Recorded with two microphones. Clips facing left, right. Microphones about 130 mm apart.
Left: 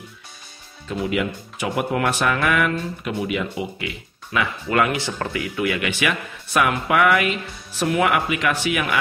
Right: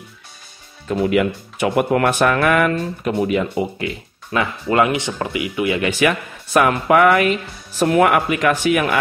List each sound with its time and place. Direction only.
0.8 s speech: 55° right (ahead or behind); by 5.8 s 20° right (ahead or behind)
5.8 s speech: 40° right (ahead or behind)